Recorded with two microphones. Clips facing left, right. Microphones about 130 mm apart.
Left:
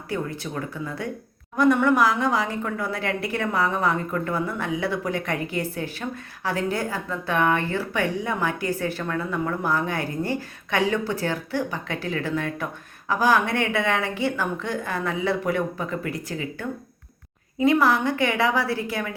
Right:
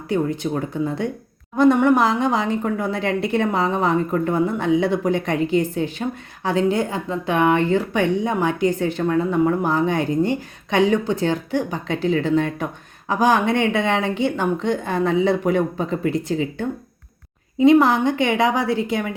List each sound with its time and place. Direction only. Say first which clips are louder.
0.1 s a woman's voice: right 8 dB; 20° right (ahead or behind)